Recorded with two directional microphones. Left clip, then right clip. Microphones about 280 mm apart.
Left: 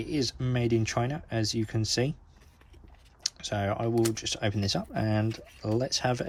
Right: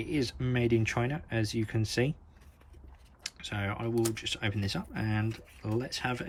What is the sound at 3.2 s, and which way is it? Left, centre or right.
Speech, centre.